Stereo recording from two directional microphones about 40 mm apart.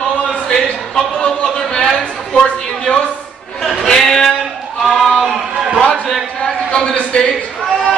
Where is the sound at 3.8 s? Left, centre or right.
Centre.